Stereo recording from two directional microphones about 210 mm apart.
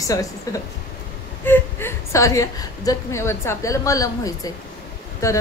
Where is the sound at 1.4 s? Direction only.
10° left (ahead or behind).